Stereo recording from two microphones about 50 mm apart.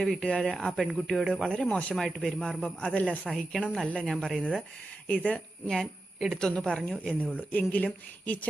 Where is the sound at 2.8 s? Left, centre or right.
Left.